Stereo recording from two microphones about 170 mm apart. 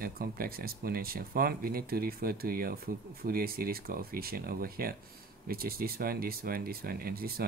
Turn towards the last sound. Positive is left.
turn(degrees=-60)  # may be behind; listen again after turning